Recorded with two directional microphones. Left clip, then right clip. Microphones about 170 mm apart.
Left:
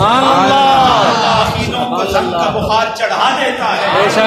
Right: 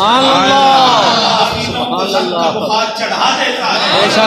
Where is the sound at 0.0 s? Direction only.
40° right (ahead or behind).